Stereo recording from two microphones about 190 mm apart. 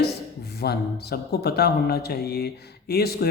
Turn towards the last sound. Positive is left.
turn(degrees=55)  # may be behind; listen again after turning